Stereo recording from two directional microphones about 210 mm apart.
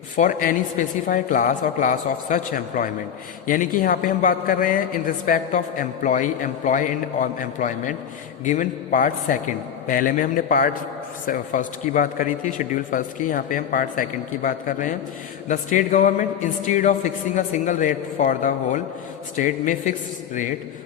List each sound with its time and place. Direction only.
0.2 s a man's voice: 40° left (ahead or behind)